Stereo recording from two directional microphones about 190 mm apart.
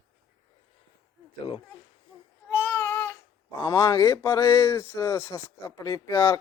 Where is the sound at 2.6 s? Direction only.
10° left (ahead or behind).